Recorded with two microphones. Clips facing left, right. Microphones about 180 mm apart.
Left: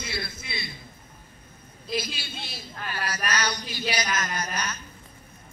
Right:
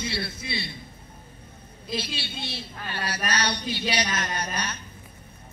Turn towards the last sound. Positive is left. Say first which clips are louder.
# right 1 dB
turn(degrees=-30)  # may be behind; listen again after turning